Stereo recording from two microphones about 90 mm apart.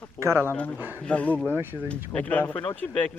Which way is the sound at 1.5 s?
25° right (ahead or behind).